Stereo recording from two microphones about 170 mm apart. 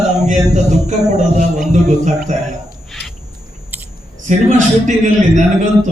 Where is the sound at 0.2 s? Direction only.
45° right (ahead or behind).